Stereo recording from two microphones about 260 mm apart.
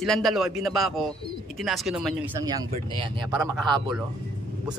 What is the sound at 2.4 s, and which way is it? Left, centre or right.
Speech, centre.